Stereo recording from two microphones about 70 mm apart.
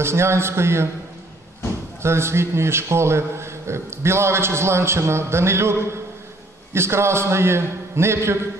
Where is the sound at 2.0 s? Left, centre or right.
Right.